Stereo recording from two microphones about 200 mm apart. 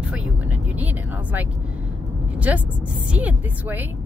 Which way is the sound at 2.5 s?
5° right (ahead or behind).